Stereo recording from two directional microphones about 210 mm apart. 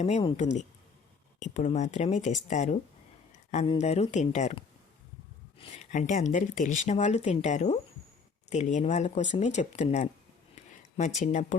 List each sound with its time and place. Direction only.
0.0 s speech: 30° left (ahead or behind)
10.5 s a sound: 35° left (ahead or behind)
11.2 s speech: 35° left (ahead or behind)